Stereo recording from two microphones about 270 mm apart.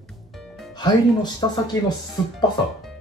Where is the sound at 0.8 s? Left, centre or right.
Centre.